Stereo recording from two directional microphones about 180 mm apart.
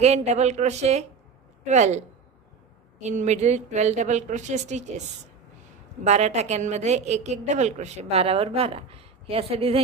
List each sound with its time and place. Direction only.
0.0 s a woman's voice: 35° right (ahead or behind)
6.0 s a woman's voice: 40° right (ahead or behind)